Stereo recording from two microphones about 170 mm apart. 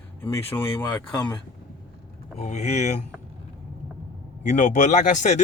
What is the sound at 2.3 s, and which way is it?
Speech, 45° left (ahead or behind).